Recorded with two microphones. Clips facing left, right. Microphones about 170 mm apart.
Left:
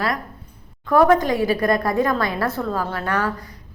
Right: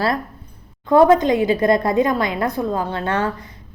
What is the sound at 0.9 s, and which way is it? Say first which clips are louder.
A woman's voice: right 3 dB; 20° right (ahead or behind).